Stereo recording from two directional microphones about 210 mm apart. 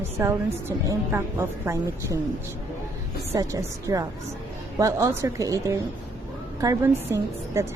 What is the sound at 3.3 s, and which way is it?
A woman's voice, 15° right (ahead or behind).